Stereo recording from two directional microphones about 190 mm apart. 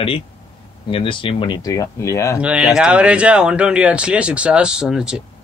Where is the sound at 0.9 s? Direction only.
25° left (ahead or behind).